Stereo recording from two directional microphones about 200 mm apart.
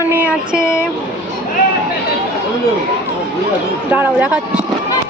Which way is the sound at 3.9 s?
5° right (ahead or behind).